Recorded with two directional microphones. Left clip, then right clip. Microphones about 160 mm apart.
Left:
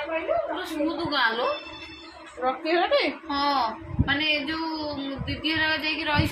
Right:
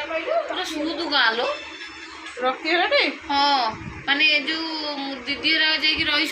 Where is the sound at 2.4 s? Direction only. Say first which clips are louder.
Right 3 dB; 20° right (ahead or behind).